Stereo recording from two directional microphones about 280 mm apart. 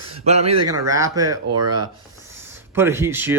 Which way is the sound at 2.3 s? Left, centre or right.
Centre.